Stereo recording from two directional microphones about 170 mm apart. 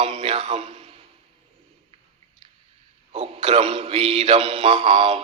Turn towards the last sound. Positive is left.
turn(degrees=-35)  # may be behind; listen again after turning